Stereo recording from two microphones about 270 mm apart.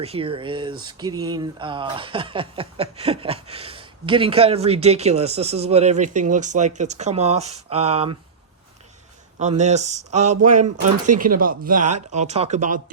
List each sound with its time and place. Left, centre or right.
0.0 s speech: right
9.4 s speech: right
11.8 s speech: right
12.1 s speech: right